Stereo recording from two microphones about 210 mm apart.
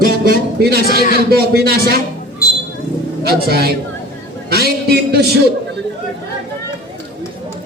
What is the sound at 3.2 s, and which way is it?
Speech, 50° right (ahead or behind).